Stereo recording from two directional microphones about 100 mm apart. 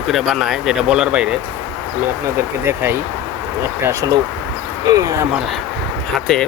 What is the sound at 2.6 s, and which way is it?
Speech, 25° right (ahead or behind).